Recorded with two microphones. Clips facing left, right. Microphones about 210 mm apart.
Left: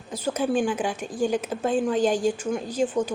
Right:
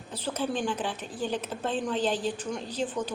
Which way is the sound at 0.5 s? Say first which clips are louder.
Left 6 dB; 10° left (ahead or behind).